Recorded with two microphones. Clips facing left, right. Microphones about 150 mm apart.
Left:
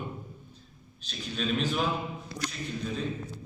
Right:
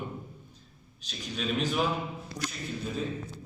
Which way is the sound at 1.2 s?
10° right (ahead or behind).